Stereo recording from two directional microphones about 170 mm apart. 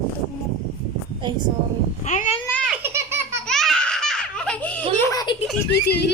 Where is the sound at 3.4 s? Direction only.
5° left (ahead or behind).